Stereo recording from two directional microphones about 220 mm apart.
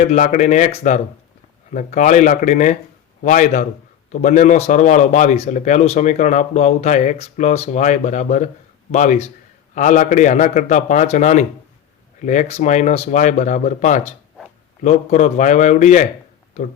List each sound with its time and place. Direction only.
0.0 s a man's voice: 35° left (ahead or behind)